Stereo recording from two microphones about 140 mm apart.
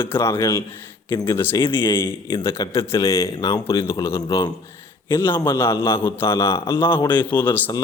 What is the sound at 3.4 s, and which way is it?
A man's voice, 25° left (ahead or behind).